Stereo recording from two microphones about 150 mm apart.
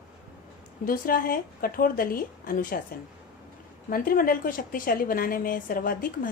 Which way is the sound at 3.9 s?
70° left (ahead or behind).